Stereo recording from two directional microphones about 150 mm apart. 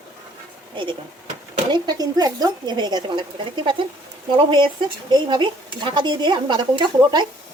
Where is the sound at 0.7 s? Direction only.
35° right (ahead or behind).